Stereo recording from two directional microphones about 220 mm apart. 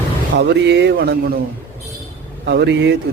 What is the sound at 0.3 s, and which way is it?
Speech, 50° right (ahead or behind).